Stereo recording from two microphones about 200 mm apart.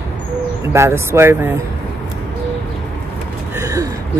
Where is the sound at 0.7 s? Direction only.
15° right (ahead or behind).